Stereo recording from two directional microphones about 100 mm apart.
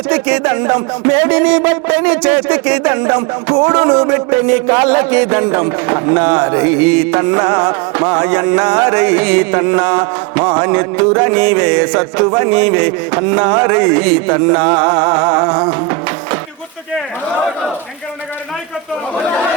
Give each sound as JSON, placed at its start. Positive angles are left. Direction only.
{"t": 0.1, "sound": "a man's voice", "side_deg": -20}